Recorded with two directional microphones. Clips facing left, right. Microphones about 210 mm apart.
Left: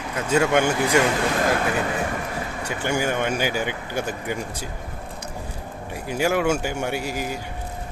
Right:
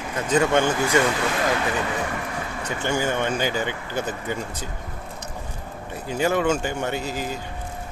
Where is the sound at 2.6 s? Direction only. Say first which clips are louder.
Even; 10° left (ahead or behind).